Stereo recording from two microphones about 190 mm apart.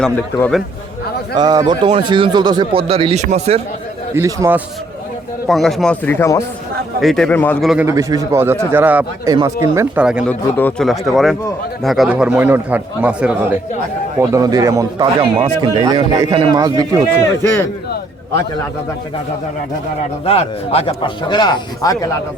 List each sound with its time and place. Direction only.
1.4 s speech: 20° right (ahead or behind)
4.1 s speech: 15° right (ahead or behind)
5.5 s a man's voice: centre (ahead or behind)
7.0 s a man's voice: centre (ahead or behind)
7.9 s speech: 20° right (ahead or behind)
10.2 s a man's voice: 10° left (ahead or behind); by 17.0 s 20° right (ahead or behind)
20.2 s a man's voice: 30° left (ahead or behind)